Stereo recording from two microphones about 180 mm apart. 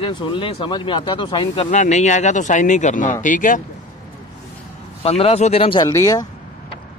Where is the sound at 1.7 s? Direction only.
40° left (ahead or behind).